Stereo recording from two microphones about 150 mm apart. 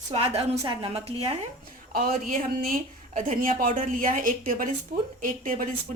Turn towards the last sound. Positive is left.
turn(degrees=-60)  # may be behind; listen again after turning